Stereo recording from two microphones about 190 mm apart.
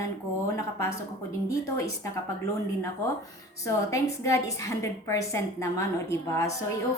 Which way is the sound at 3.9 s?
15° left (ahead or behind).